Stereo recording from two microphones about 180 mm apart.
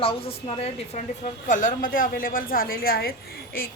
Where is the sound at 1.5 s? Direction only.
50° left (ahead or behind).